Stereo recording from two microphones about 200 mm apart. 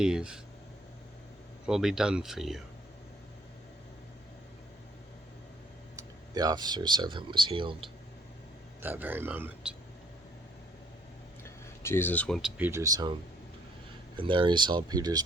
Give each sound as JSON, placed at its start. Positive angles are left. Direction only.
{"t": 0.0, "sound": "speech", "side_deg": -5}
{"t": 1.6, "sound": "speech", "side_deg": -5}
{"t": 6.0, "sound": "speech", "side_deg": -20}
{"t": 8.8, "sound": "speech", "side_deg": -10}
{"t": 11.4, "sound": "a sound", "side_deg": 10}
{"t": 12.5, "sound": "speech", "side_deg": -10}
{"t": 14.2, "sound": "speech", "side_deg": -25}